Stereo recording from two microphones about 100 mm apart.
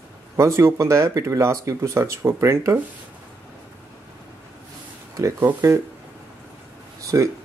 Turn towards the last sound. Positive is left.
turn(degrees=-30)  # may be behind; listen again after turning